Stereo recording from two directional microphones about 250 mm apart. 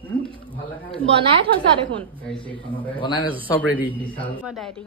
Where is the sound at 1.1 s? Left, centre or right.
Right.